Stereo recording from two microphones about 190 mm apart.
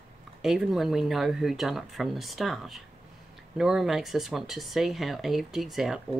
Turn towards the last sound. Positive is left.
turn(degrees=0)  # may be behind; listen again after turning